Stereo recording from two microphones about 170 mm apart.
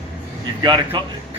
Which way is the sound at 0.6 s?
25° right (ahead or behind).